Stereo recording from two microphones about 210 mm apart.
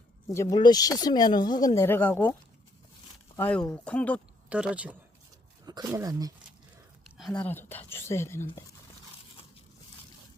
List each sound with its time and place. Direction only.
0.3 s speech: 15° left (ahead or behind)
3.3 s speech: 10° left (ahead or behind)
4.4 s speech: 5° right (ahead or behind)
5.6 s speech: 15° right (ahead or behind)
7.3 s speech: 10° left (ahead or behind)